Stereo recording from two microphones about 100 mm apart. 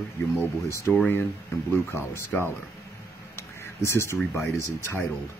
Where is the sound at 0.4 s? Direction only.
30° left (ahead or behind).